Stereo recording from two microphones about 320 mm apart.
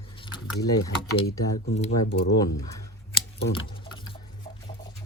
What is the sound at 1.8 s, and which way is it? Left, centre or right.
Speech, left.